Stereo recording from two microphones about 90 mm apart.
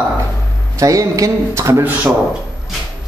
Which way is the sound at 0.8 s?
40° right (ahead or behind).